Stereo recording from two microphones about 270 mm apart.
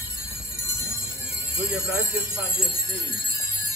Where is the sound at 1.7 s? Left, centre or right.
Centre.